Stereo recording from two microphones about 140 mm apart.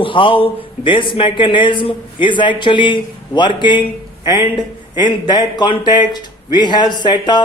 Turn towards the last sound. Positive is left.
turn(degrees=30)  # may be behind; listen again after turning